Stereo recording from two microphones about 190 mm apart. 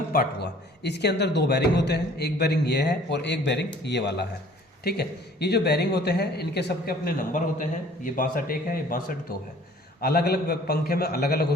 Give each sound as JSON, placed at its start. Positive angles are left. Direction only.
{"t": 0.1, "sound": "speech", "side_deg": 50}
{"t": 0.8, "sound": "a man's voice", "side_deg": 60}